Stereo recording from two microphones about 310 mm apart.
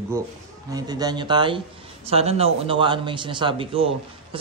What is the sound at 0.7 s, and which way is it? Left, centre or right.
Speech, centre.